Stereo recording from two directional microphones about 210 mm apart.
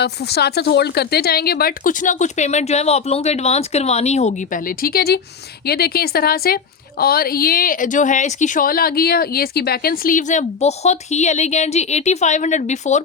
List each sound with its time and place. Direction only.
0.0 s a woman's voice: 50° left (ahead or behind); by 13.0 s 35° left (ahead or behind)